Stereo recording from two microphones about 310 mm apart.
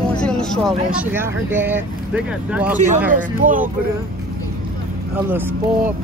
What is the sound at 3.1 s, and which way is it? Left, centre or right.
Speech, right.